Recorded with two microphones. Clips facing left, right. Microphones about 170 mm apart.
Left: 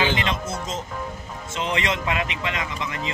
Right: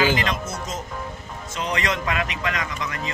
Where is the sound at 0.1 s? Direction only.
25° left (ahead or behind).